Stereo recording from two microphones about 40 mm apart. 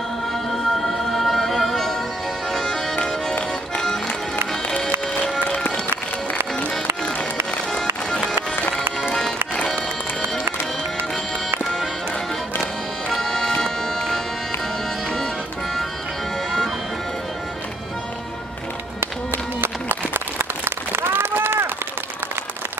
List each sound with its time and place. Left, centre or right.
0.3 s music: centre
4.5 s music: centre
7.7 s music: centre
13.1 s music: centre
19.6 s applause: right
21.2 s run: right